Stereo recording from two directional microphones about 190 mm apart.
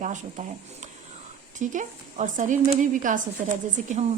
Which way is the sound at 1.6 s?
40° right (ahead or behind).